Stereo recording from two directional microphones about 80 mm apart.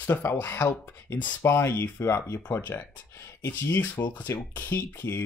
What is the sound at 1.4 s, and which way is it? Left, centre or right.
Speech, left.